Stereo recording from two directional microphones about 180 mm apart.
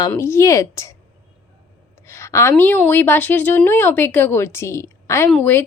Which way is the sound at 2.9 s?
10° left (ahead or behind).